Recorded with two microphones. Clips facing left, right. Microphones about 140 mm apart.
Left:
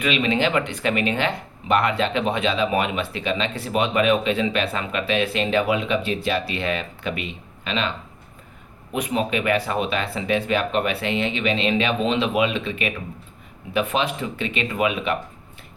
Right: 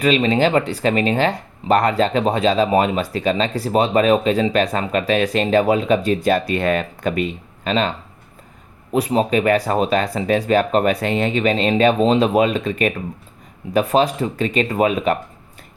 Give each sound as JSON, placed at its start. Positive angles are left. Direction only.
{"t": 0.0, "sound": "speech", "side_deg": -35}